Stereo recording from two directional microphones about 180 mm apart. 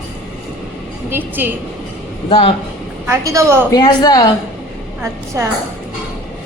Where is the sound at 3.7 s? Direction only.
20° left (ahead or behind).